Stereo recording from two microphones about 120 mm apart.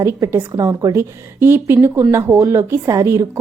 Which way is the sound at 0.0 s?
25° right (ahead or behind).